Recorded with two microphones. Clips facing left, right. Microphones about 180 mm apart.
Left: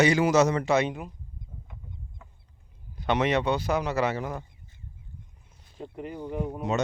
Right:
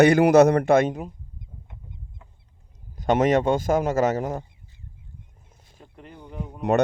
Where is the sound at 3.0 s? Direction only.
45° right (ahead or behind).